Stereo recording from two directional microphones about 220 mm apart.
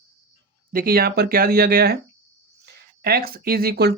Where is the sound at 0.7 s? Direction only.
40° right (ahead or behind).